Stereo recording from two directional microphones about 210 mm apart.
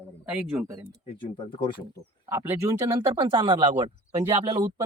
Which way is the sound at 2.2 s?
10° right (ahead or behind).